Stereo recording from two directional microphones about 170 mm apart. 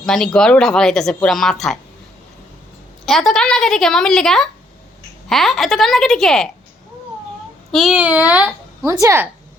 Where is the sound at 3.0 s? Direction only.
Centre (ahead or behind).